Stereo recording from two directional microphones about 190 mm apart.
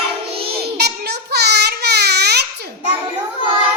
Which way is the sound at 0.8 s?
60° right (ahead or behind).